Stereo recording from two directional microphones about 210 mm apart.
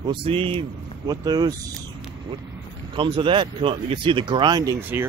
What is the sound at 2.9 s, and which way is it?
Speech, 25° right (ahead or behind).